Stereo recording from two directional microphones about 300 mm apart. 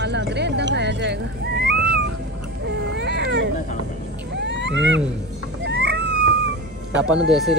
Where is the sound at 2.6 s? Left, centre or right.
Right.